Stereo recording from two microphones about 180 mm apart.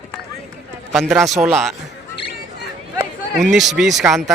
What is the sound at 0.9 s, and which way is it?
Speech, centre (ahead or behind).